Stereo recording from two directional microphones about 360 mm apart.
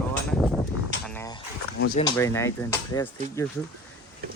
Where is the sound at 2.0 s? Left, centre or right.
Centre.